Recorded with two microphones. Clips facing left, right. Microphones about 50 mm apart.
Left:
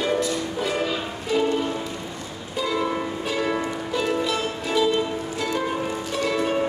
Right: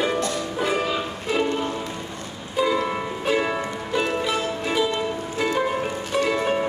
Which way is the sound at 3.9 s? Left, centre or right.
Right.